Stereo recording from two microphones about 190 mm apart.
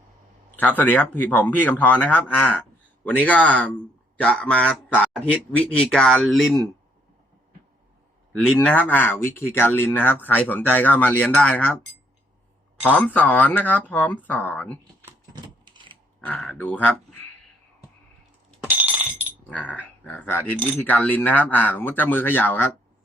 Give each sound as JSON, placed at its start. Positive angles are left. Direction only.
{"t": 0.5, "sound": "a man's voice", "side_deg": 10}
{"t": 8.4, "sound": "speech", "side_deg": 5}
{"t": 12.8, "sound": "speech", "side_deg": 10}
{"t": 15.7, "sound": "a sound", "side_deg": -25}
{"t": 16.2, "sound": "speech", "side_deg": 5}
{"t": 18.6, "sound": "a sound", "side_deg": -10}
{"t": 19.5, "sound": "speech", "side_deg": 10}